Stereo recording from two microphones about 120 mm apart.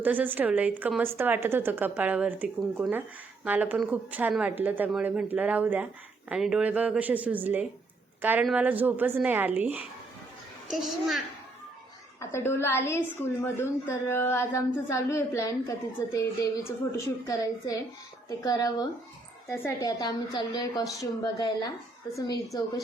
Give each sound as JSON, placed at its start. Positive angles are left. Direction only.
{"t": 0.0, "sound": "a woman's voice", "side_deg": -15}
{"t": 10.7, "sound": "a child's voice", "side_deg": 0}
{"t": 12.2, "sound": "speech", "side_deg": 20}